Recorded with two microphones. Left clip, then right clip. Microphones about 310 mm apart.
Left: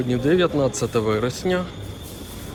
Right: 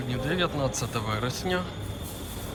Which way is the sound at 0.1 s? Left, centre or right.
Centre.